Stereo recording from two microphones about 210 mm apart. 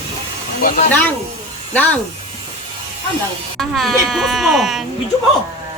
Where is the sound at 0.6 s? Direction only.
40° left (ahead or behind).